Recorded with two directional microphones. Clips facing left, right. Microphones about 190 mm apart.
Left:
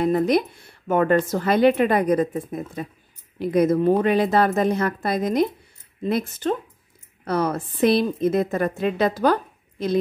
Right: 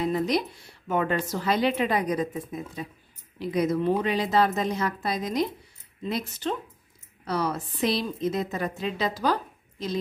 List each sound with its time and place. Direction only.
0.0 s a woman's voice: 55° left (ahead or behind)